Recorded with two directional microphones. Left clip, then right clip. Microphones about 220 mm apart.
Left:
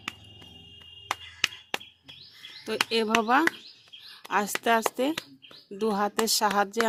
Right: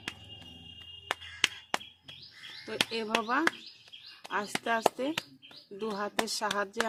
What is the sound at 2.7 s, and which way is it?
A woman's voice, 50° left (ahead or behind).